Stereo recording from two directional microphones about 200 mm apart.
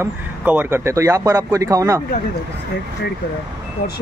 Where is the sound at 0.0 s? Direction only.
10° right (ahead or behind).